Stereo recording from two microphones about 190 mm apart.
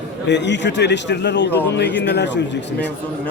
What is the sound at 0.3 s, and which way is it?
A man's voice, 65° left (ahead or behind).